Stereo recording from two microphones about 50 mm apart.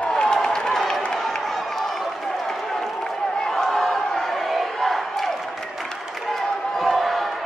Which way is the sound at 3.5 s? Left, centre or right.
Centre.